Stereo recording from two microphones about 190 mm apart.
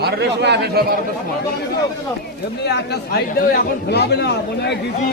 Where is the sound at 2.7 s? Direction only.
60° left (ahead or behind).